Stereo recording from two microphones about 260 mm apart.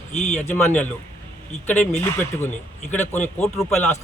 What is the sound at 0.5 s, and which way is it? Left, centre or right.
Speech, centre.